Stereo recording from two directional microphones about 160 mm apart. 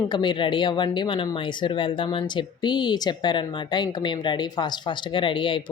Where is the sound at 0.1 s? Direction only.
30° left (ahead or behind).